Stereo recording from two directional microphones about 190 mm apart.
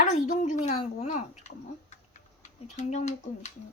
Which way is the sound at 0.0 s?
40° left (ahead or behind).